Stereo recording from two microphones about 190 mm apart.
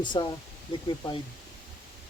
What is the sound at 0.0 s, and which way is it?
Speech, 25° left (ahead or behind).